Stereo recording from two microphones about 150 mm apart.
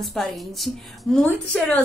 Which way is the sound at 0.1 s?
Centre (ahead or behind).